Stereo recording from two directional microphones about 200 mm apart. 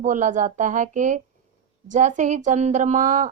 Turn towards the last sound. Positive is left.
turn(degrees=-40)  # may be behind; listen again after turning